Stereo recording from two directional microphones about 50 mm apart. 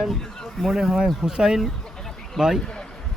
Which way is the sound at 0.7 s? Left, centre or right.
Centre.